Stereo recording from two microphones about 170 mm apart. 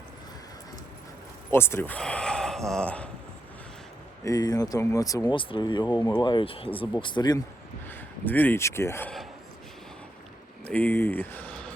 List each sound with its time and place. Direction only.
1.5 s speech: 15° left (ahead or behind)
4.2 s speech: 20° left (ahead or behind)
7.9 s speech: 10° left (ahead or behind)
10.6 s speech: 10° left (ahead or behind)